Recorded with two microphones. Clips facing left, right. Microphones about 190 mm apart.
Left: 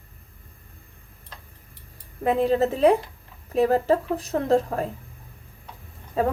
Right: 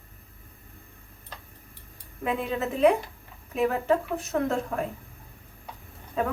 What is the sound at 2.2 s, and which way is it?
Speech, 35° left (ahead or behind).